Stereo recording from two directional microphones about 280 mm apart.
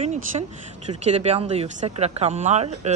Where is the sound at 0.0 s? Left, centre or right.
Right.